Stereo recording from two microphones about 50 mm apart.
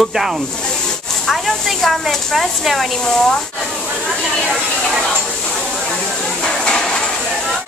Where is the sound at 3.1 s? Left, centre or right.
Centre.